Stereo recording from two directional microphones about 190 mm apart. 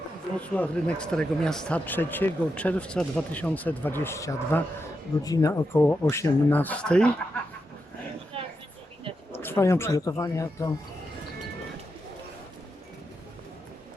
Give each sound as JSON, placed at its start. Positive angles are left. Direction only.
{"t": 0.3, "sound": "speech", "side_deg": 5}
{"t": 9.4, "sound": "speech", "side_deg": 15}